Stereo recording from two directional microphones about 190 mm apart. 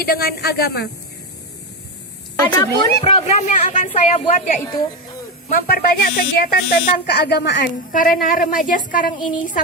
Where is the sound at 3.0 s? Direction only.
40° left (ahead or behind).